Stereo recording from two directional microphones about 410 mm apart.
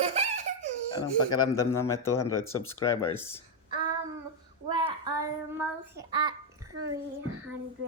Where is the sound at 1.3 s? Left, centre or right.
Centre.